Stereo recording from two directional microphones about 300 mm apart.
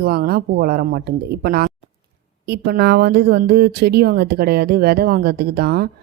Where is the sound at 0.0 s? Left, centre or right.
Right.